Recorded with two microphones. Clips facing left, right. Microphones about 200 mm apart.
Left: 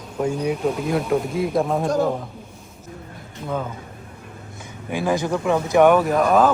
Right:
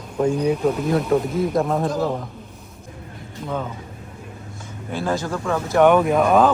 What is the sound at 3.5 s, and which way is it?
Speech, 5° left (ahead or behind).